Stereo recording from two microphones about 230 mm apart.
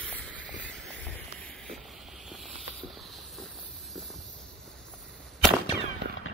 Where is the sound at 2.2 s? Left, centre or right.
Centre.